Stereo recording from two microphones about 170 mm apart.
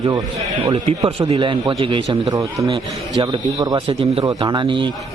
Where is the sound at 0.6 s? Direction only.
35° right (ahead or behind).